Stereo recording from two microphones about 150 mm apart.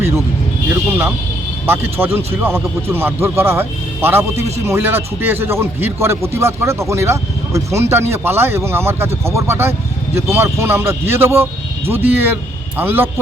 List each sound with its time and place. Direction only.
0.9 s a man's voice: 15° right (ahead or behind)
2.1 s a man's voice: 15° right (ahead or behind)